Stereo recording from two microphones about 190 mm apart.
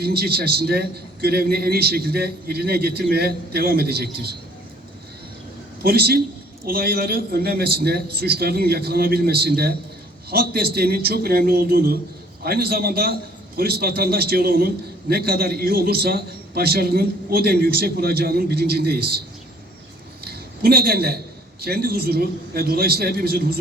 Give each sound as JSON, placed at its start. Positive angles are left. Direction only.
{"t": 0.0, "sound": "a man's voice", "side_deg": -55}
{"t": 5.8, "sound": "a man's voice", "side_deg": -55}
{"t": 20.2, "sound": "a sound", "side_deg": -55}
{"t": 21.6, "sound": "a man's voice", "side_deg": -55}